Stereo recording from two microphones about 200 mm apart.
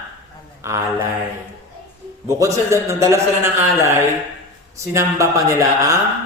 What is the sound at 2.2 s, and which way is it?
A man's voice, 15° right (ahead or behind).